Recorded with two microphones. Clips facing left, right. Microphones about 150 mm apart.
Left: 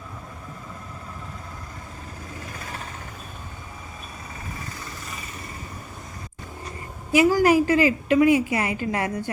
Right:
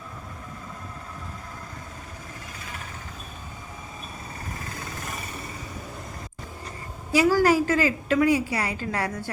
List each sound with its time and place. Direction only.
7.1 s a woman's voice: 15° left (ahead or behind)